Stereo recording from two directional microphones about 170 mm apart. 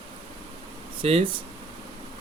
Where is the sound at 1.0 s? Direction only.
30° right (ahead or behind).